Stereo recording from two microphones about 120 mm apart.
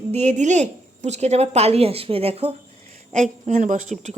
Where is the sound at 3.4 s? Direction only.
90° right.